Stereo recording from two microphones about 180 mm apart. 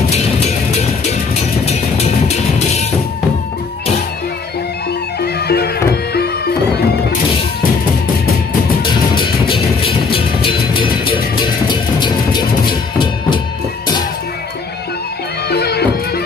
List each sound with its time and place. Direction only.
1.7 s music: 35° left (ahead or behind)
5.2 s music: 60° left (ahead or behind)
8.8 s music: 25° left (ahead or behind)
15.5 s music: 65° left (ahead or behind)